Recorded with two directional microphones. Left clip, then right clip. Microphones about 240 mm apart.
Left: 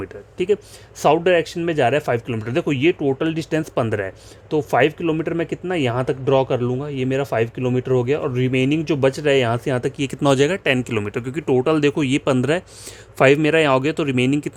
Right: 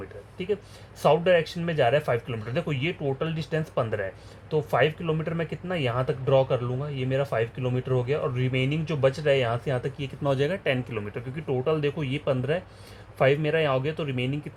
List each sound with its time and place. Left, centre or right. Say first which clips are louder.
0.3 s speech: left 10 dB; left